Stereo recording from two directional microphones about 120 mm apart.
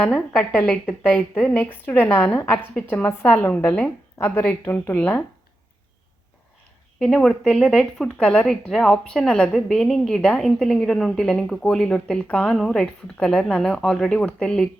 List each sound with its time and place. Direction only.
0.0 s a woman's voice: 10° left (ahead or behind)
7.0 s speech: 5° left (ahead or behind)